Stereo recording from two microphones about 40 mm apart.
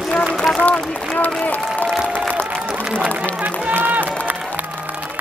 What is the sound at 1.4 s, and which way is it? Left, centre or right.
Speech, left.